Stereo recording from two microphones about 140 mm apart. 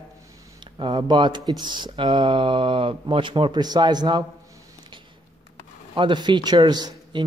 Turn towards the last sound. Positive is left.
turn(degrees=-30)  # may be behind; listen again after turning